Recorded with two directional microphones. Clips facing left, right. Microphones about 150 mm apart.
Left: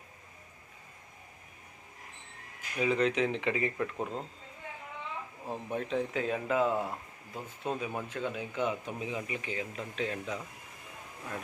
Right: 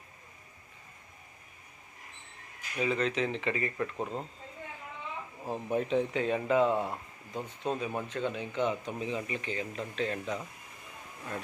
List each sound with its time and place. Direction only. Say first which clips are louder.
2.7 s speech: left 2 dB; 10° left (ahead or behind)
3.8 s speech: even; centre (ahead or behind)
5.5 s speech: right 4 dB; 5° right (ahead or behind)